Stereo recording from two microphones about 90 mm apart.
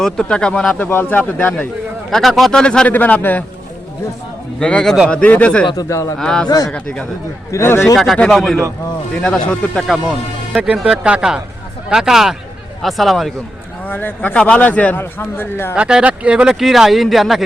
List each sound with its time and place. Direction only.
0.0 s speech: 10° left (ahead or behind)
0.8 s a man's voice: 20° left (ahead or behind)
2.0 s speech: centre (ahead or behind); by 3.4 s 20° left (ahead or behind)
4.6 s speech: 10° left (ahead or behind)
5.7 s speech: 35° left (ahead or behind)
6.1 s speech: 5° left (ahead or behind)
7.5 s a man's voice: 30° left (ahead or behind)
7.9 s speech: 5° left (ahead or behind)
10.9 s speech: 10° right (ahead or behind)
13.8 s a man's voice: 20° left (ahead or behind)
15.7 s speech: 10° right (ahead or behind)